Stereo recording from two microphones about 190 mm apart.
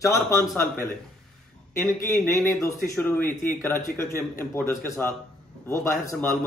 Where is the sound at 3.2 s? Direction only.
45° left (ahead or behind).